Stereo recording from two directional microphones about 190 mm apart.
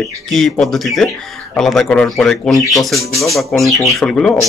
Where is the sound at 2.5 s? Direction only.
15° left (ahead or behind).